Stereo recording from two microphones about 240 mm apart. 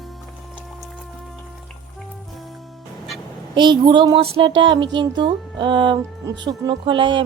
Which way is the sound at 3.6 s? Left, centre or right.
Centre.